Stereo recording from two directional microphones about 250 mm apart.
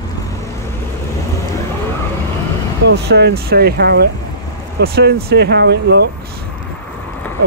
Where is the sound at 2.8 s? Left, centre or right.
Right.